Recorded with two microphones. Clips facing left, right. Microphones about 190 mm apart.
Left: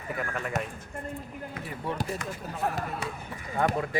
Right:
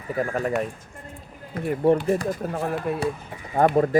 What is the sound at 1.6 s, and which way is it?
Speech, 55° right (ahead or behind).